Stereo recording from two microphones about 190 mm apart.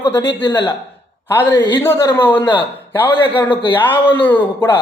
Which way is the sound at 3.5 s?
25° left (ahead or behind).